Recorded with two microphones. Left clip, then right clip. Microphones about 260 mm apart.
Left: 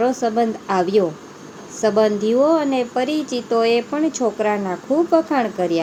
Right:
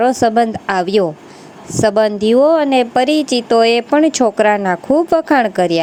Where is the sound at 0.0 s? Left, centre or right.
Right.